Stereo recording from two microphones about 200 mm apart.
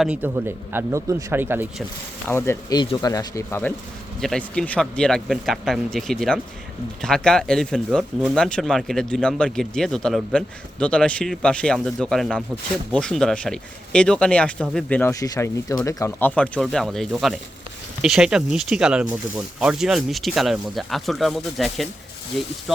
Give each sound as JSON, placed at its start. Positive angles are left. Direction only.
{"t": 0.0, "sound": "speech", "side_deg": -10}
{"t": 2.2, "sound": "speech", "side_deg": 10}